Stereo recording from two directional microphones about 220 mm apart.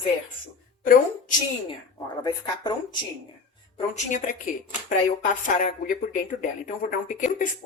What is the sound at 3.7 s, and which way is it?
Speech, 35° left (ahead or behind).